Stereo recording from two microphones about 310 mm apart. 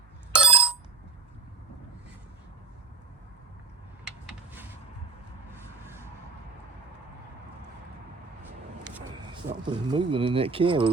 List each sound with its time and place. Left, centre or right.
0.3 s bicycle bell: centre
4.0 s a sound: centre
8.8 s speech: centre